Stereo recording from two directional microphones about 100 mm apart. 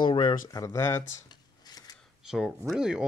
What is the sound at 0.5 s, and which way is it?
Speech, 35° left (ahead or behind).